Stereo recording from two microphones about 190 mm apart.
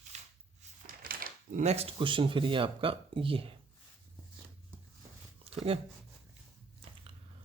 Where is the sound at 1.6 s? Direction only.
30° right (ahead or behind).